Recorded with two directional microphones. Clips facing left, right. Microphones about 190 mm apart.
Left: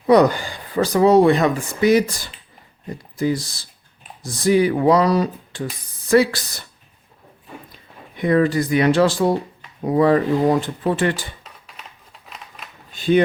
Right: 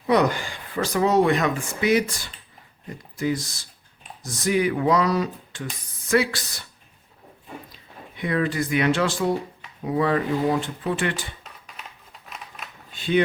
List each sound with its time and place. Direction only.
0.1 s speech: 35° left (ahead or behind)
7.7 s speech: 45° left (ahead or behind)
12.9 s a sound: 40° left (ahead or behind)